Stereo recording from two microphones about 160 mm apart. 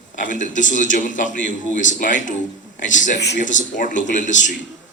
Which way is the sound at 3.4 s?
50° left (ahead or behind).